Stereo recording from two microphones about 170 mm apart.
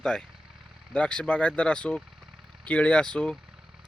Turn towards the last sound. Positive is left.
turn(degrees=5)  # may be behind; listen again after turning